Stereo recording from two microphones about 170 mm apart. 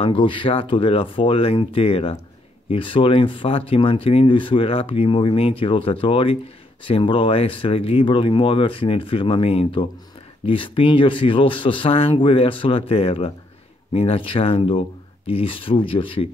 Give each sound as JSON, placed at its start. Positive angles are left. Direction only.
{"t": 0.0, "sound": "speech", "side_deg": 30}